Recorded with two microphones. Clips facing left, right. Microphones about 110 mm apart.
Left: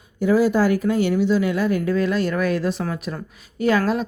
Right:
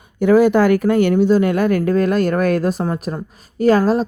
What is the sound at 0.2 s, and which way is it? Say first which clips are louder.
Speech: right 5 dB; 65° right (ahead or behind).